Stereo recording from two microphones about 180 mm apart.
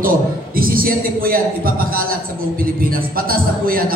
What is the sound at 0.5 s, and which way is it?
A man's voice, 55° right (ahead or behind).